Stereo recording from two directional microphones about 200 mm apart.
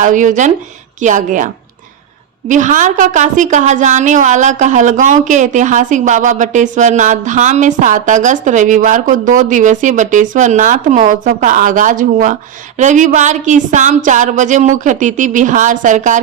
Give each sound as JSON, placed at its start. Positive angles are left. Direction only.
{"t": 0.0, "sound": "a woman's voice", "side_deg": -40}
{"t": 2.5, "sound": "a woman's voice", "side_deg": -40}